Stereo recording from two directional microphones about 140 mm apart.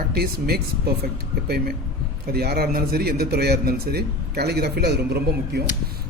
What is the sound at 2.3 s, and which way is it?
A man's voice, 90° right.